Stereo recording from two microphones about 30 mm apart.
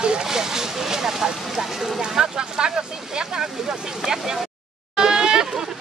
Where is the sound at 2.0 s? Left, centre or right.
Right.